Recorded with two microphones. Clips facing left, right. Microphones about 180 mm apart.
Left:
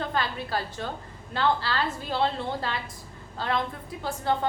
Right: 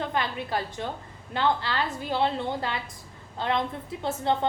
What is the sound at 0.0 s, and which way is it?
A woman's voice, 15° right (ahead or behind).